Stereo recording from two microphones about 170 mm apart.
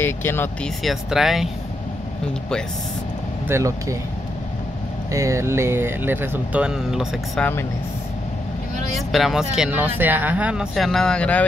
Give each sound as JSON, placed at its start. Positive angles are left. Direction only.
{"t": 0.0, "sound": "speech", "side_deg": 15}
{"t": 0.8, "sound": "speech", "side_deg": 0}
{"t": 3.4, "sound": "speech", "side_deg": -15}
{"t": 5.1, "sound": "speech", "side_deg": -15}
{"t": 9.1, "sound": "speech", "side_deg": 0}